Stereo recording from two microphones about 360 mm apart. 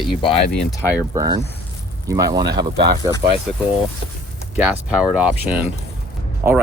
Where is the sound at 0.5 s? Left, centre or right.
Centre.